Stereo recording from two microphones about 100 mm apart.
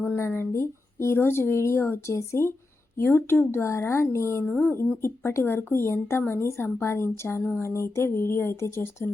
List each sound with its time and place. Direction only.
0.0 s speech: 20° left (ahead or behind)